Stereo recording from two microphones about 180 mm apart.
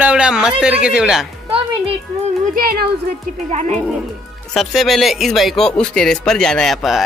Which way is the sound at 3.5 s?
40° right (ahead or behind).